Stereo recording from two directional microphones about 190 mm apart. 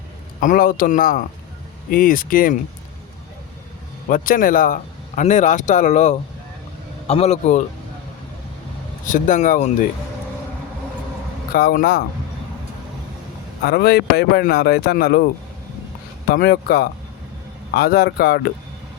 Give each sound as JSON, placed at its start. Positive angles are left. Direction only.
{"t": 0.3, "sound": "a man's voice", "side_deg": 45}
{"t": 4.1, "sound": "a man's voice", "side_deg": 45}
{"t": 9.0, "sound": "a man's voice", "side_deg": 45}
{"t": 11.5, "sound": "a man's voice", "side_deg": 50}
{"t": 13.7, "sound": "speech", "side_deg": 55}
{"t": 16.3, "sound": "speech", "side_deg": 55}